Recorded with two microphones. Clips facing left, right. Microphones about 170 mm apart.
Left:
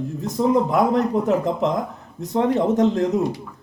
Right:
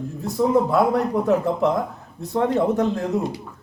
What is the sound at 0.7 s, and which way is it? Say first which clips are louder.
A man's voice: left 1 dB; 20° left (ahead or behind).